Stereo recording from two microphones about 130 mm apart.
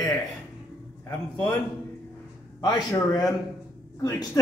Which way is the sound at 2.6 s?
30° left (ahead or behind).